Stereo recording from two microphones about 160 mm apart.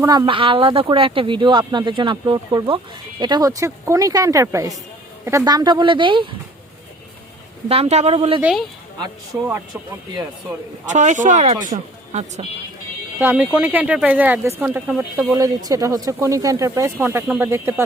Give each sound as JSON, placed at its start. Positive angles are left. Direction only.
{"t": 0.0, "sound": "speech", "side_deg": -20}
{"t": 0.3, "sound": "speech", "side_deg": -35}
{"t": 7.7, "sound": "a man's voice", "side_deg": -40}
{"t": 8.4, "sound": "speech", "side_deg": -5}
{"t": 9.0, "sound": "speech", "side_deg": -20}
{"t": 10.8, "sound": "speech", "side_deg": -50}
{"t": 13.1, "sound": "speech", "side_deg": -10}